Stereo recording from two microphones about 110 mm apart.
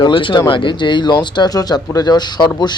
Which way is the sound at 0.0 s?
50° left (ahead or behind).